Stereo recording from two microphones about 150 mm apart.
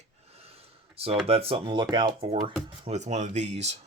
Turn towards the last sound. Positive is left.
turn(degrees=-50)  # may be behind; listen again after turning